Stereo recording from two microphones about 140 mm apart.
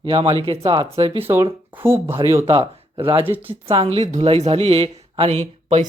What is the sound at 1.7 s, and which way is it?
Speech, 15° right (ahead or behind).